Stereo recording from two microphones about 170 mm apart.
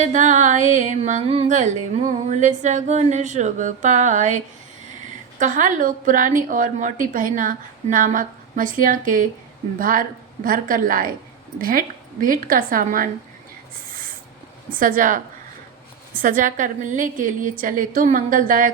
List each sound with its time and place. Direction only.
0.0 s music: 45° right (ahead or behind)
9.7 s a woman's voice: 55° right (ahead or behind)
14.8 s music: 55° right (ahead or behind)